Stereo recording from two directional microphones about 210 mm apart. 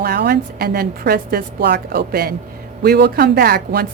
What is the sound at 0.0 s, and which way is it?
A woman's voice, 50° right (ahead or behind).